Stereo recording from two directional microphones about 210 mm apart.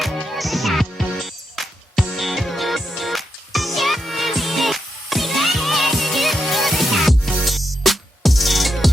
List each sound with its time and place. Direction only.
0.0 s music: centre (ahead or behind)